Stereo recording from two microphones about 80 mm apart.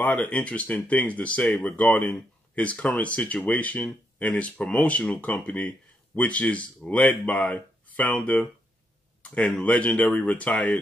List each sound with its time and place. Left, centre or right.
0.0 s speech: centre